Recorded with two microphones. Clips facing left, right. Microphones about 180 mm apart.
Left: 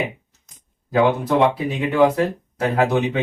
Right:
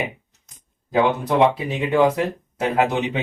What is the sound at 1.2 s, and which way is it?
Speech, 20° right (ahead or behind).